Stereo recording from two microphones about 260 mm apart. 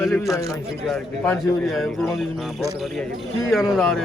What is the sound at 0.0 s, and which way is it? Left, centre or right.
Speech, centre.